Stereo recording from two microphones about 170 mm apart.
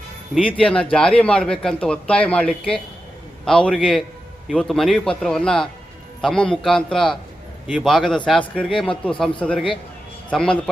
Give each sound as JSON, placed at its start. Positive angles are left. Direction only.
{"t": 0.6, "sound": "speech", "side_deg": 5}